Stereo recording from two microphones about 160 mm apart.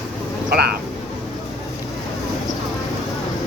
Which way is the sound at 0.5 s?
75° right (ahead or behind).